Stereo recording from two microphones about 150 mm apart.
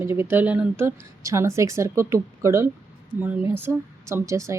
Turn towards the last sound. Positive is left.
turn(degrees=-20)  # may be behind; listen again after turning